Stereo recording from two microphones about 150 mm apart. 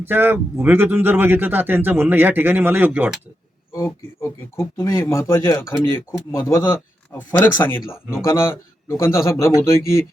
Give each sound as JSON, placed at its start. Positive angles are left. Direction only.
{"t": 0.1, "sound": "speech", "side_deg": -15}
{"t": 3.7, "sound": "speech", "side_deg": 20}